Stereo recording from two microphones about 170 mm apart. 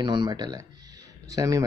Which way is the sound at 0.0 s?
25° right (ahead or behind).